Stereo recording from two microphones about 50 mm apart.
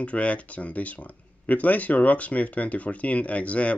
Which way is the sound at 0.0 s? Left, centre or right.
Left.